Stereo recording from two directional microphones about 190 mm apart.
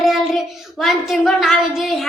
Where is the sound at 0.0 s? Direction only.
Centre (ahead or behind).